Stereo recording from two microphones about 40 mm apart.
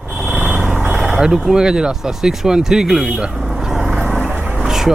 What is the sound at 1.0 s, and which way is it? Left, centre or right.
Speech, centre.